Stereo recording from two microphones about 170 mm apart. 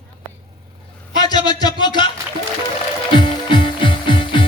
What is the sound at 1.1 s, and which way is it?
Speech, 25° left (ahead or behind).